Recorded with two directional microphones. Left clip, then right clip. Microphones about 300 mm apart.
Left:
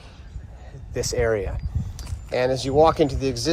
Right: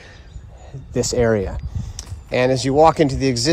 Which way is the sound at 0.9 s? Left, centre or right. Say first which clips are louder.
Right 5 dB; right.